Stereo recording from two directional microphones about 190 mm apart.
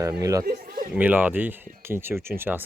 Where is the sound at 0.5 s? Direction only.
45° right (ahead or behind).